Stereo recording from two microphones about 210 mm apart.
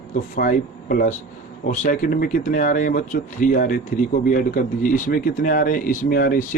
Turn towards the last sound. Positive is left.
turn(degrees=45)  # may be behind; listen again after turning